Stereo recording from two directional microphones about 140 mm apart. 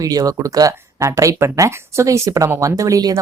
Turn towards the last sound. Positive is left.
turn(degrees=-25)  # may be behind; listen again after turning